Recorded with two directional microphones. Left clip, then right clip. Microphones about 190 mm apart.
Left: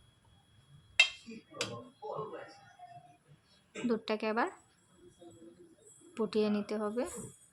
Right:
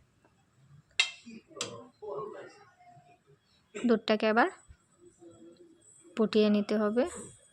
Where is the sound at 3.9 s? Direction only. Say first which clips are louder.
Right 7 dB; 25° right (ahead or behind).